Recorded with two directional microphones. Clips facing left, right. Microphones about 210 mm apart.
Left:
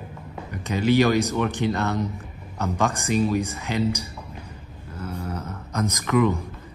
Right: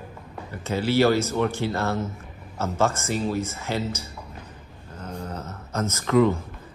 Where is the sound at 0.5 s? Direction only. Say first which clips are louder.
Left 3 dB; 15° left (ahead or behind).